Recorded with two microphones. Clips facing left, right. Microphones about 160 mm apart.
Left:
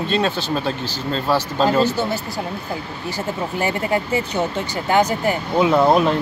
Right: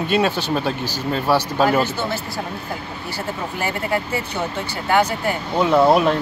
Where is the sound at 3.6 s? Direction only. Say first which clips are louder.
Left 2 dB; 20° left (ahead or behind).